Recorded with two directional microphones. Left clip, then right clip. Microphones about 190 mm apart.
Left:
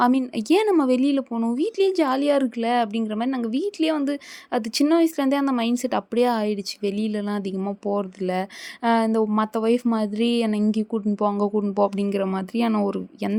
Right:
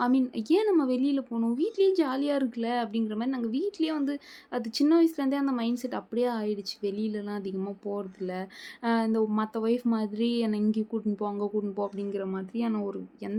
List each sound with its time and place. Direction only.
0.0 s speech: 45° left (ahead or behind)